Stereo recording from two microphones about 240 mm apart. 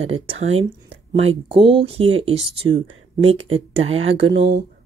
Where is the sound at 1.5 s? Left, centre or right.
Right.